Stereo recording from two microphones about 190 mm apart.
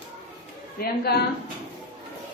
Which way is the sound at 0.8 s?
50° left (ahead or behind).